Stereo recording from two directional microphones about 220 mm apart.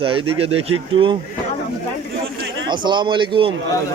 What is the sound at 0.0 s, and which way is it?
Speech, 25° right (ahead or behind).